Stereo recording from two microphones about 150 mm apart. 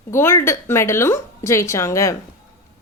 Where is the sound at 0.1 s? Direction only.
15° left (ahead or behind).